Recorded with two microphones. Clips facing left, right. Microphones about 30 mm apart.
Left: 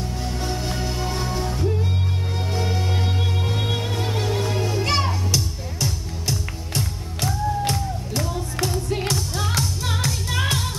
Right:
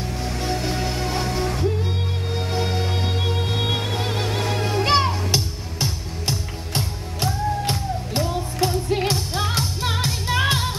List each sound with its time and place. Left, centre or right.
0.4 s music: right
1.2 s music: right
2.3 s music: right
4.0 s music: right